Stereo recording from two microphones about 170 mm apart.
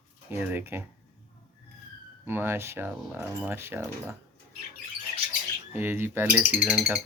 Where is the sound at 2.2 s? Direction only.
15° right (ahead or behind).